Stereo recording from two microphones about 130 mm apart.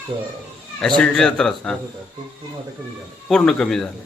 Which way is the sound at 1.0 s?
5° left (ahead or behind).